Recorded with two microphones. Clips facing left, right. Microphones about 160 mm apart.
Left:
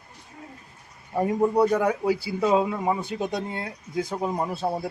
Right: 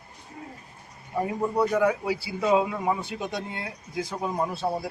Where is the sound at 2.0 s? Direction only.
50° left (ahead or behind).